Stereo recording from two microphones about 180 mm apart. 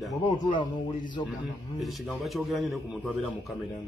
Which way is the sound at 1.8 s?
Centre (ahead or behind).